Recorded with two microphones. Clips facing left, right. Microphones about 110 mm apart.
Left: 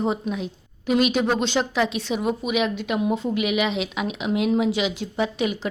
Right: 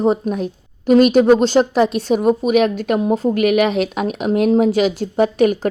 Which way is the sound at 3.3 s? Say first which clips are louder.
Right 8 dB; 50° right (ahead or behind).